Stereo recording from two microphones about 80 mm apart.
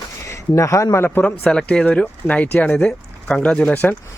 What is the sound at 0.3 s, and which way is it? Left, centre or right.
Speech, left.